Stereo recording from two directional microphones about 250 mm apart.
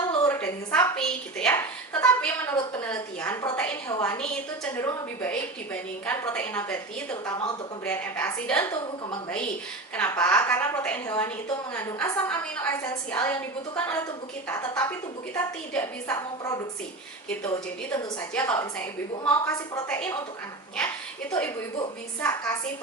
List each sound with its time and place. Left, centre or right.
0.3 s a woman's voice: centre
9.9 s a woman's voice: centre